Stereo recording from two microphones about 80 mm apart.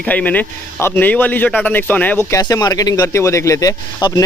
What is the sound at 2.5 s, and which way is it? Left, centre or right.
Speech, left.